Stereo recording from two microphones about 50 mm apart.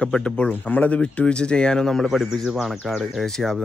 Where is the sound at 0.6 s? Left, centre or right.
Left; by 2.0 s centre.